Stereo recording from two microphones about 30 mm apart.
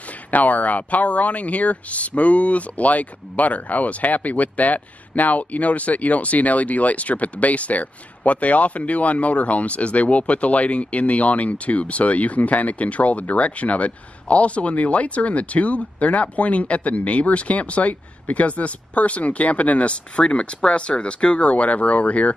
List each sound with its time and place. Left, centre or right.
0.3 s speech: left